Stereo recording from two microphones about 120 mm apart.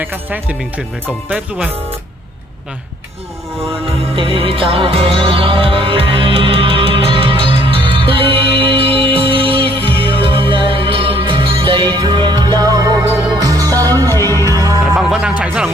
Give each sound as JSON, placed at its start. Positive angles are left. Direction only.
{"t": 0.0, "sound": "speech", "side_deg": -15}
{"t": 3.8, "sound": "music", "side_deg": -50}
{"t": 15.0, "sound": "music", "side_deg": -5}